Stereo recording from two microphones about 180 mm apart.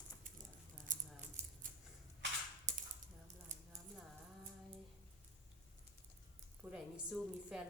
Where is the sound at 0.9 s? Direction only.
45° right (ahead or behind).